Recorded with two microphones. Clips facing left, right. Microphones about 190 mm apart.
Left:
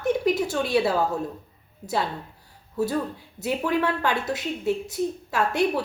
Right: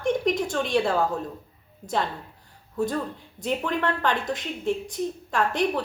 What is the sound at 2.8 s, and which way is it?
Speech, 5° left (ahead or behind).